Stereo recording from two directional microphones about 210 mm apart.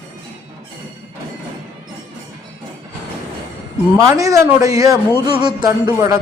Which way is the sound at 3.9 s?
15° right (ahead or behind).